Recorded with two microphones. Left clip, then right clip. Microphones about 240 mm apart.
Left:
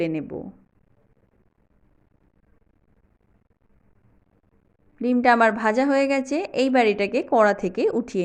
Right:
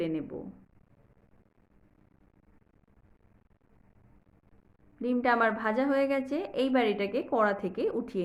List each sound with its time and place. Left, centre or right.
0.0 s a woman's voice: left
4.9 s a woman's voice: left